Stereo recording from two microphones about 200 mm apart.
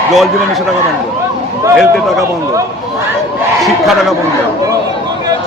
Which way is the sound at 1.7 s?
Centre (ahead or behind).